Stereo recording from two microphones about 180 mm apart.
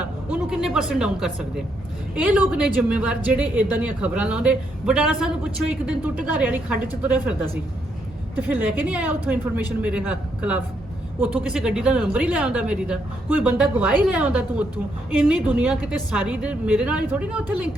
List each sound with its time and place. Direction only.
0.0 s a sound: 5° right (ahead or behind)
2.1 s speech: 10° right (ahead or behind)
8.4 s speech: 10° right (ahead or behind)